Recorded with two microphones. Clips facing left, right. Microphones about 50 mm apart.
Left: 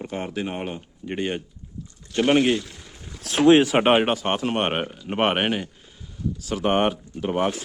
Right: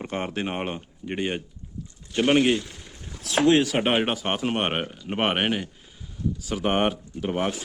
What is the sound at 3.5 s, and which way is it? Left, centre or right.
Speech, left.